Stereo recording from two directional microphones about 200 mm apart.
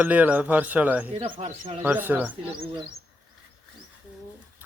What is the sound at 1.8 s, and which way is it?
Speech, 10° right (ahead or behind).